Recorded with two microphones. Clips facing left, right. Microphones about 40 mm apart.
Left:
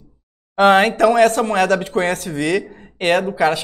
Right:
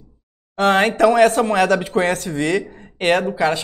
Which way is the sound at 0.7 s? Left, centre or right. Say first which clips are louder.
Left 1 dB; centre.